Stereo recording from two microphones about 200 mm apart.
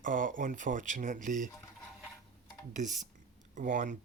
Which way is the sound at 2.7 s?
40° right (ahead or behind).